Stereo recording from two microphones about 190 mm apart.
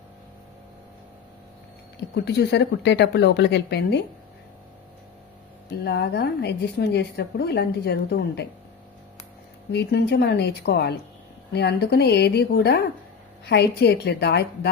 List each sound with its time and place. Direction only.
2.0 s a woman's voice: 60° left (ahead or behind)
5.8 s a woman's voice: 60° left (ahead or behind)
9.7 s a woman's voice: 60° left (ahead or behind)